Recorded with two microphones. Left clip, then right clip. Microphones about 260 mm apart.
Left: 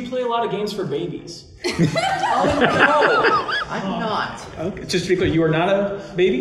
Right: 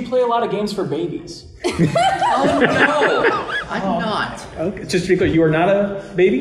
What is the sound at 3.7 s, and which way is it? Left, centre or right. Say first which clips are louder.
Chuckle: right 3 dB; right.